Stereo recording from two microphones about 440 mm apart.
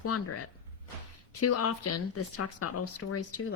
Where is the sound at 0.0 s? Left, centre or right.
Left.